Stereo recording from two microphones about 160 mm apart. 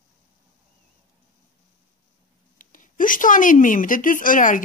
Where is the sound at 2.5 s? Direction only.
55° left (ahead or behind).